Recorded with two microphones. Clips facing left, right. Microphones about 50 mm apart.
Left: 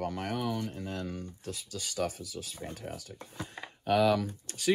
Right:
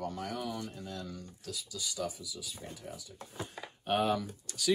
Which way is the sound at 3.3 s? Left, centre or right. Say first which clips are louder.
Even; left.